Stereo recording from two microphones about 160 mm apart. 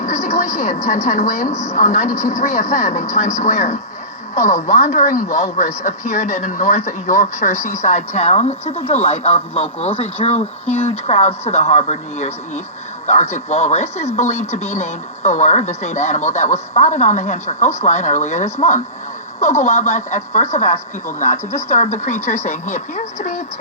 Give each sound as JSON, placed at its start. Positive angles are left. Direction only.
{"t": 0.0, "sound": "a woman's voice", "side_deg": 45}